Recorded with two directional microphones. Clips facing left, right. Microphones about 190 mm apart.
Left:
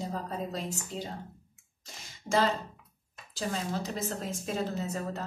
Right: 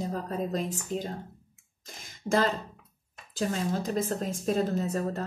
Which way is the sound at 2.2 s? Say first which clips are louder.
Right 1 dB; 50° right (ahead or behind).